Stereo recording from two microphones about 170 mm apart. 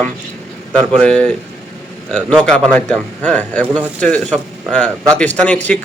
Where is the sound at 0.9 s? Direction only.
5° left (ahead or behind).